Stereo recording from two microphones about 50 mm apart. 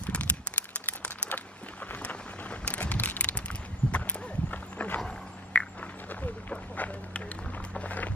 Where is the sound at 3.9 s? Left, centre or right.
Left.